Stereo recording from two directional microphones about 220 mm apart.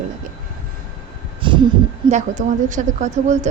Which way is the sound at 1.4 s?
20° right (ahead or behind).